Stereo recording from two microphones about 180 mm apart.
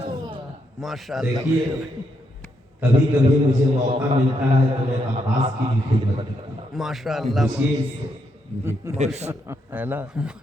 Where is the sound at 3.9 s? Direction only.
30° right (ahead or behind).